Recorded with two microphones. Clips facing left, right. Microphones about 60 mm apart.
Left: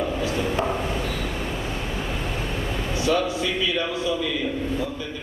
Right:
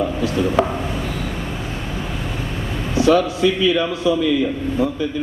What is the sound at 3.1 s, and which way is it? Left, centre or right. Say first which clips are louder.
A man's voice: right 8 dB; right.